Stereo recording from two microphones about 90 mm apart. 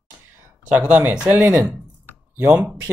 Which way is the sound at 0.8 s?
20° right (ahead or behind).